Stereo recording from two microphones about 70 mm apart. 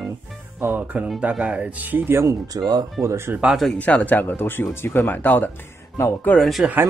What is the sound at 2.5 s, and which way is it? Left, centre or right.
Speech, right.